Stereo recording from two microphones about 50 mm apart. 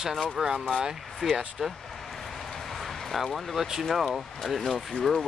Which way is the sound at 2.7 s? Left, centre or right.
Centre.